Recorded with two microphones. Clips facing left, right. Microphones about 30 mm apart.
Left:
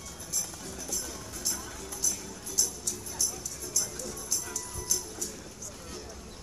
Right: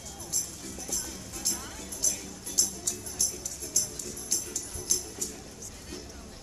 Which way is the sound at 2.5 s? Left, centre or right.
Right.